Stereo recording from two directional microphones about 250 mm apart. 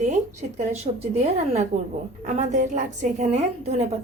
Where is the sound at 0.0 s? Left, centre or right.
Right.